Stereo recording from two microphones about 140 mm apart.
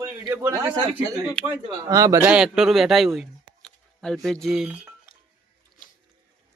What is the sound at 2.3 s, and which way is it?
A man's voice, 5° right (ahead or behind).